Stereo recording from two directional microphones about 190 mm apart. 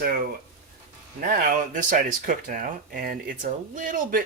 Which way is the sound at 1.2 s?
50° right (ahead or behind).